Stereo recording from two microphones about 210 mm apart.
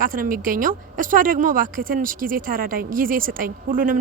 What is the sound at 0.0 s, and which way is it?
Speech, 40° right (ahead or behind).